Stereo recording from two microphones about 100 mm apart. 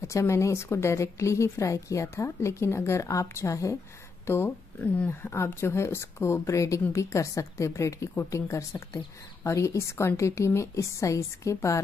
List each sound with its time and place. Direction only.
0.0 s a woman's voice: 30° left (ahead or behind)
4.3 s a woman's voice: 20° left (ahead or behind)